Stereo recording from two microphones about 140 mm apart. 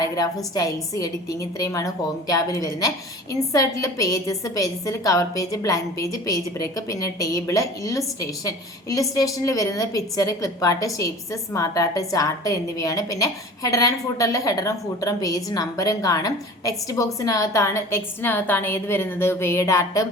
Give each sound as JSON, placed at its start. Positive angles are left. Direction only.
{"t": 0.5, "sound": "a woman's voice", "side_deg": 25}